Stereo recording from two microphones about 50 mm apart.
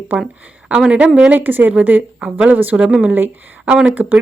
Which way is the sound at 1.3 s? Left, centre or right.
Right.